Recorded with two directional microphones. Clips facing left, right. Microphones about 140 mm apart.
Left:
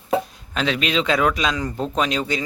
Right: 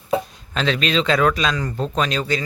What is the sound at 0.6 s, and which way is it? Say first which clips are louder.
Speech: right 1 dB; 10° left (ahead or behind).